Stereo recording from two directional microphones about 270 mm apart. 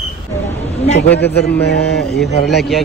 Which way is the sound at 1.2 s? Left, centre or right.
Left.